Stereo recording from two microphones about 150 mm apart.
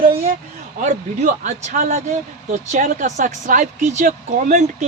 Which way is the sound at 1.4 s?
55° right (ahead or behind).